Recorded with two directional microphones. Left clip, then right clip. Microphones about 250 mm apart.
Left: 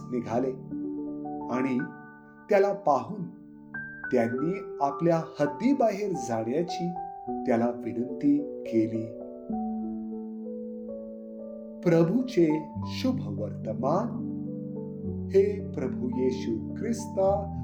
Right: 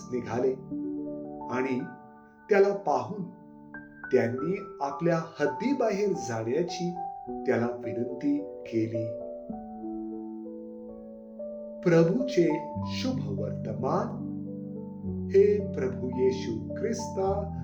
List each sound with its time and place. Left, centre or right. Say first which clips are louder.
0.1 s speech: right 1 dB; left
4.1 s speech: right 1 dB; left
11.8 s speech: right 1 dB; left
15.3 s speech: right 2 dB; left